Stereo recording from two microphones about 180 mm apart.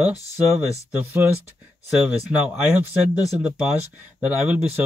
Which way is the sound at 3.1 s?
20° left (ahead or behind).